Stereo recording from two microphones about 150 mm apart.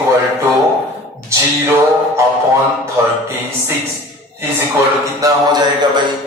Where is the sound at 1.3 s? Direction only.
20° right (ahead or behind).